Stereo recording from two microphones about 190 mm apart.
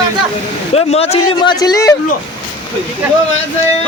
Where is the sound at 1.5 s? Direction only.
20° left (ahead or behind).